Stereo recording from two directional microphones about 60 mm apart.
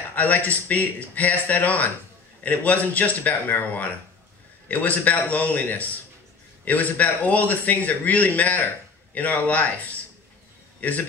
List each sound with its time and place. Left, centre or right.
0.1 s a man's voice: left